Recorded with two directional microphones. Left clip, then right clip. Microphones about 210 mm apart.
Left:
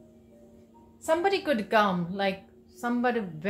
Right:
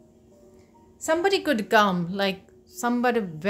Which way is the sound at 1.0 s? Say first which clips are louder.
Right 3 dB; 50° right (ahead or behind).